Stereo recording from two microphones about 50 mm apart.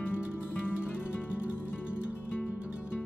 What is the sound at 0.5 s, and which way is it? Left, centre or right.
Music, left.